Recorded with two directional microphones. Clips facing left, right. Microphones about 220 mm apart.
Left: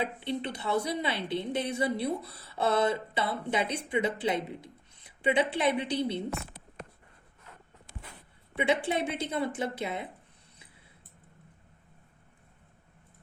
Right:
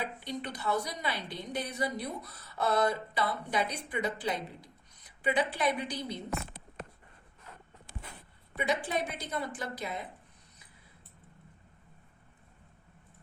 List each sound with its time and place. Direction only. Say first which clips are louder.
0.0 s speech: left 5 dB; 25° left (ahead or behind)
8.5 s speech: left 4 dB; 25° left (ahead or behind)